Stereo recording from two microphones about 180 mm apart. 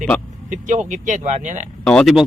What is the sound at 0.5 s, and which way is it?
Speech, 45° right (ahead or behind).